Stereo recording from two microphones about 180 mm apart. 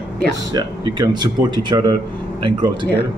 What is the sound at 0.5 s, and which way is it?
Speech, 25° right (ahead or behind).